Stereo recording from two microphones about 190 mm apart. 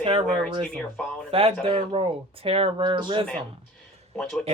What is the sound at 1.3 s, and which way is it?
Speech, 30° right (ahead or behind).